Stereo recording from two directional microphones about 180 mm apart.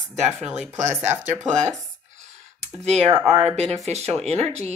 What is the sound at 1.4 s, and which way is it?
Speech, 40° right (ahead or behind).